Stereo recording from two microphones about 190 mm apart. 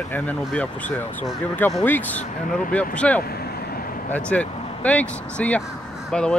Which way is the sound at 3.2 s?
55° left (ahead or behind).